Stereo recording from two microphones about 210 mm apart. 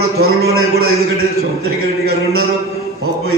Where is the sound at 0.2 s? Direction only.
50° right (ahead or behind).